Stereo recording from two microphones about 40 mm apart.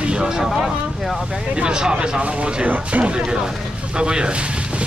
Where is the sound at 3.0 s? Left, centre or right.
Right.